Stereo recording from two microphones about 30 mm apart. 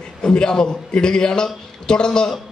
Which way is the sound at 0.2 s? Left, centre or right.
Left.